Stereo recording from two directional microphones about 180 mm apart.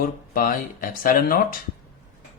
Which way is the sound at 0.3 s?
55° left (ahead or behind).